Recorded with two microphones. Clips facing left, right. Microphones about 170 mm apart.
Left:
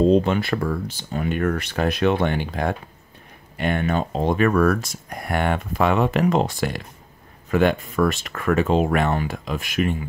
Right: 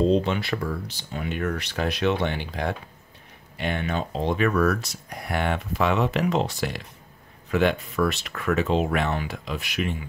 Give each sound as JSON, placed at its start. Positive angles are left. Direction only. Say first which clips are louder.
{"t": 0.1, "sound": "speech", "louder": "left 4 dB", "side_deg": 50}